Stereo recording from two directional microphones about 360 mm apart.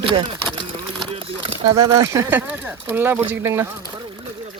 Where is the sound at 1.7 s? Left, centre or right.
Centre.